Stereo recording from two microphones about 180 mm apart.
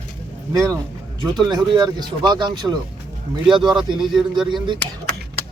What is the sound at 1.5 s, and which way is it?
A man's voice, 25° right (ahead or behind).